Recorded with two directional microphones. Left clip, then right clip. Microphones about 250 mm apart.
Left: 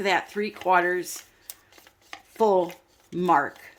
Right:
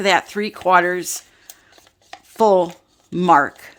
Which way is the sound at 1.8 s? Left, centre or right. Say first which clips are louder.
Right 3 dB; centre.